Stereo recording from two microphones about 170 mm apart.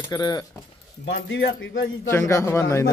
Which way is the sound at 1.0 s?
80° left.